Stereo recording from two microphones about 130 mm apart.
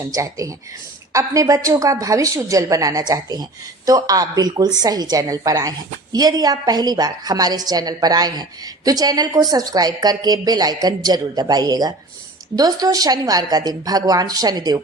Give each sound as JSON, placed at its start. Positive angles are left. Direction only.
{"t": 0.0, "sound": "a woman's voice", "side_deg": -25}